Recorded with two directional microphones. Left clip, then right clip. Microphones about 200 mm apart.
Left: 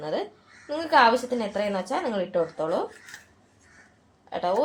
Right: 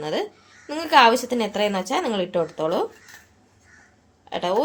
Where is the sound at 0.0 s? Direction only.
40° right (ahead or behind).